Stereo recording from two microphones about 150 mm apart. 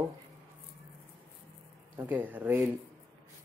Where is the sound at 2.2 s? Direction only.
10° right (ahead or behind).